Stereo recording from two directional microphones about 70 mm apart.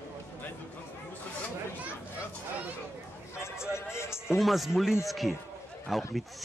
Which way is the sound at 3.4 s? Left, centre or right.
Left.